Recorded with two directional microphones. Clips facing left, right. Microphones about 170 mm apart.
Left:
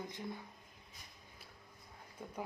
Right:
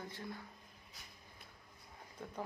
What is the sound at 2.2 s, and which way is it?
Speech, 10° left (ahead or behind).